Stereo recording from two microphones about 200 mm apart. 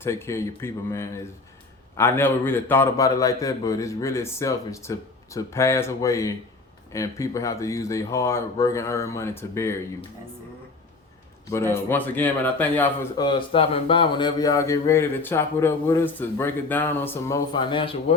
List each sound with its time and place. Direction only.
0.0 s speech: 15° left (ahead or behind)
11.5 s speech: 15° left (ahead or behind)
13.1 s speech: 25° left (ahead or behind)